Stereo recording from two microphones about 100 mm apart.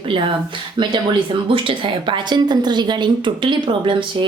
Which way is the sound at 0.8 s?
50° right (ahead or behind).